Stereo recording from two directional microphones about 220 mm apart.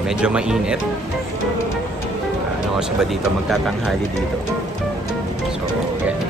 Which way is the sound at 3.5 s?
Centre (ahead or behind).